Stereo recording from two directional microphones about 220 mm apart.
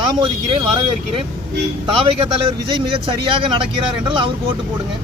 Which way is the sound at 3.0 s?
25° right (ahead or behind).